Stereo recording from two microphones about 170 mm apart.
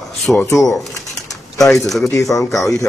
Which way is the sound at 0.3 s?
15° left (ahead or behind).